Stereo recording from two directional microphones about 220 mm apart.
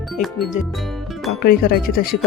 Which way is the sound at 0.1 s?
Centre (ahead or behind).